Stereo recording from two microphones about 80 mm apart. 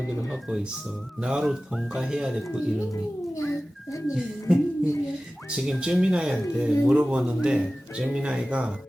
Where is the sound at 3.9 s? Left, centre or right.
Left.